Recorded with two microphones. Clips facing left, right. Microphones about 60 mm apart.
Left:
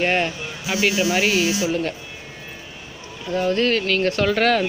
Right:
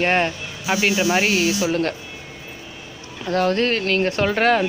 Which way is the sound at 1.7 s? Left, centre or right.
Right.